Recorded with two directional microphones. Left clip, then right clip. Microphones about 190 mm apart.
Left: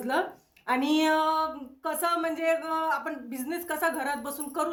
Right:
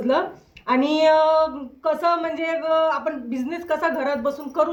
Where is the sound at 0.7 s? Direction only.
25° left (ahead or behind).